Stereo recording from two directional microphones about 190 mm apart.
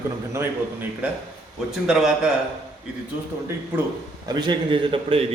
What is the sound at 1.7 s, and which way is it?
Speech, centre (ahead or behind).